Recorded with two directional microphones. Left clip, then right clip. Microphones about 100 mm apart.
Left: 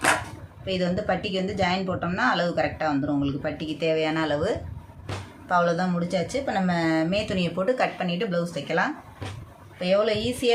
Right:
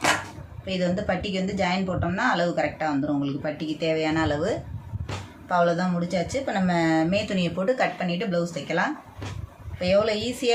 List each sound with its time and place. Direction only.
0.6 s speech: 30° left (ahead or behind)